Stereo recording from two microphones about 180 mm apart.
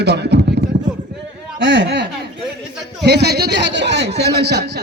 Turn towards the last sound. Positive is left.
turn(degrees=-65)  # may be behind; listen again after turning